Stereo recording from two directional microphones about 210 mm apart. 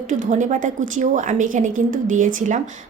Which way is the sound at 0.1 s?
35° right (ahead or behind).